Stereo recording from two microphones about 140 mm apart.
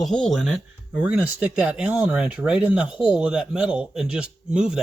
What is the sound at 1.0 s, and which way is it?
Speech, 10° right (ahead or behind).